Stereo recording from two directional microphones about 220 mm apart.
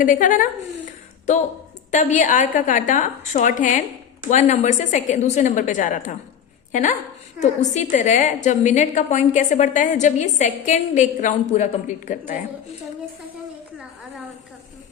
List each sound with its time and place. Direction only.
0.0 s a woman's voice: 35° left (ahead or behind)
1.9 s a woman's voice: 35° left (ahead or behind)